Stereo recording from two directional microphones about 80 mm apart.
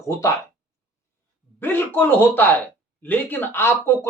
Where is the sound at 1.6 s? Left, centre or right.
Left.